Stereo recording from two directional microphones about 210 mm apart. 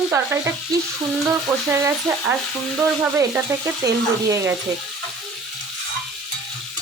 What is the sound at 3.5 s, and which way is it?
Frying, 15° right (ahead or behind).